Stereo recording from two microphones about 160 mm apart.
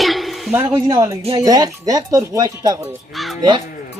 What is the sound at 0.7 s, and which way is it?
Speech, 20° right (ahead or behind).